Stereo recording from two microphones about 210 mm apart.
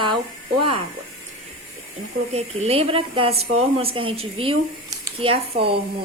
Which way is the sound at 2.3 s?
30° right (ahead or behind).